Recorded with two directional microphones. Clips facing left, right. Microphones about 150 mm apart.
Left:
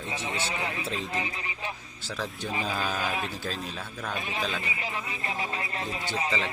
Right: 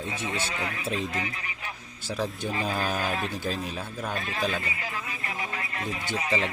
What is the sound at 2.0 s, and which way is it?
Speech, 15° right (ahead or behind).